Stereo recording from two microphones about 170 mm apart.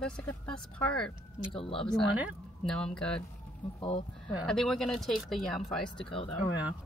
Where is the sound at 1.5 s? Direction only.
35° left (ahead or behind).